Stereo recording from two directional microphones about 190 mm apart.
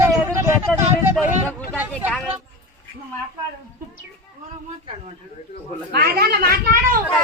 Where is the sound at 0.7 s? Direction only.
5° left (ahead or behind).